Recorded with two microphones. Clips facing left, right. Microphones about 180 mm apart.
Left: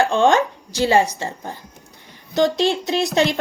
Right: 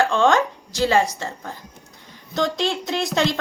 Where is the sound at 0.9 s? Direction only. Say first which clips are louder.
Left 3 dB; 20° left (ahead or behind).